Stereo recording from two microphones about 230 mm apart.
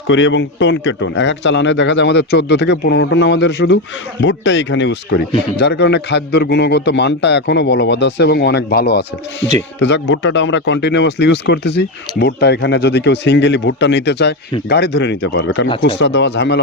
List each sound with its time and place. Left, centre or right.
0.1 s a man's voice: left